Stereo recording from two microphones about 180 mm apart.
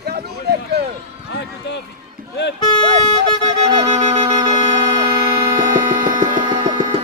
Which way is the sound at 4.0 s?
40° right (ahead or behind).